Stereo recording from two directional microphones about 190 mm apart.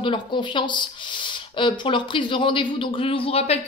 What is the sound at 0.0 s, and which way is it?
A woman's voice, 25° left (ahead or behind).